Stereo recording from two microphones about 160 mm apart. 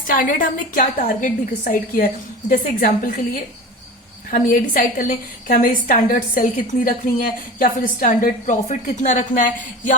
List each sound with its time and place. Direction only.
0.1 s a woman's voice: 60° left (ahead or behind)
4.3 s a woman's voice: 60° left (ahead or behind)